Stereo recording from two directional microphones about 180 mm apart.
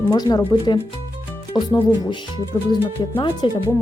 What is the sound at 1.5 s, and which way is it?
Speech, 20° left (ahead or behind).